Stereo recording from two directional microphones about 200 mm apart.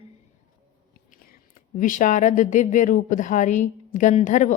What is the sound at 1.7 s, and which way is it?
Speech, 40° left (ahead or behind).